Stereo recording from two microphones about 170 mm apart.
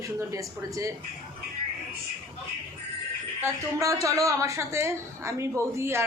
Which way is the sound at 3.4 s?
20° right (ahead or behind).